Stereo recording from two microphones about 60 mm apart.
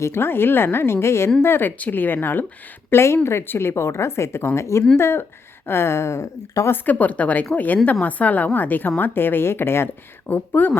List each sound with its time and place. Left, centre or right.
0.0 s a woman's voice: left
2.9 s a woman's voice: left
6.8 s a woman's voice: left
10.2 s a woman's voice: left